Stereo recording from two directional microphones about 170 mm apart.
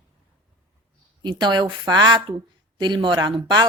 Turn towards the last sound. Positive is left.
turn(degrees=-25)  # may be behind; listen again after turning